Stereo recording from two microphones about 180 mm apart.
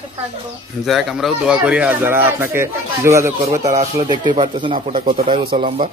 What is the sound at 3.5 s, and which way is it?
Speech, 40° right (ahead or behind).